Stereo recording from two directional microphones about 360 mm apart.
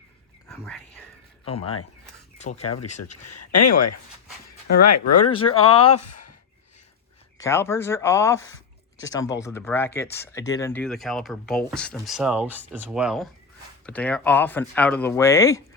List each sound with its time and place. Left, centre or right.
0.5 s speech: centre
1.5 s speech: centre
3.0 s speech: left
5.5 s speech: centre
5.9 s speech: left
7.3 s speech: centre
8.4 s a sound: left
9.0 s speech: centre